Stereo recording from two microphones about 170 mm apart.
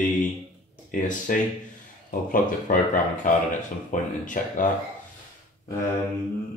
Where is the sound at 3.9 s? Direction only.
50° left (ahead or behind).